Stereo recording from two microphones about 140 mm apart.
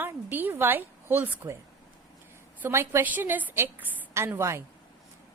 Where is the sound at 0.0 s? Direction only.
15° right (ahead or behind).